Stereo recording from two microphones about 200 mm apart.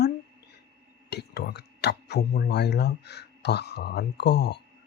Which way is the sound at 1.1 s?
55° left (ahead or behind).